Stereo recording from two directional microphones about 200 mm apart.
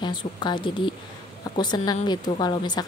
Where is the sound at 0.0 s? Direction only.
20° left (ahead or behind).